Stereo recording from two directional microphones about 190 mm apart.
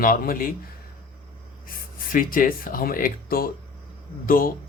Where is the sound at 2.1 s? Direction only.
45° left (ahead or behind).